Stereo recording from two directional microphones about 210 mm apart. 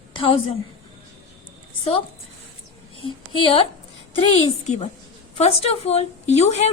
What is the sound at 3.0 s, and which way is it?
A woman's voice, 25° left (ahead or behind).